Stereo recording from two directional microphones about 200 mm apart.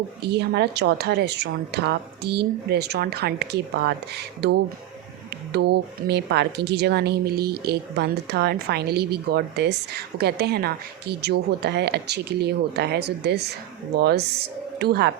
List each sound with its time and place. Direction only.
0.2 s speech: 55° right (ahead or behind)